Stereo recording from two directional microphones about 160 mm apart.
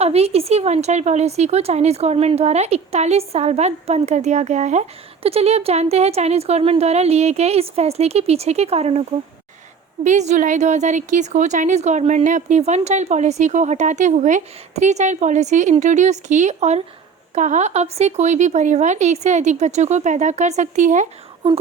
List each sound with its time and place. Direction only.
0.0 s a woman's voice: 40° right (ahead or behind)